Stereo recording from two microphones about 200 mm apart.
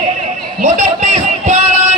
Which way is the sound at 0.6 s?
35° right (ahead or behind).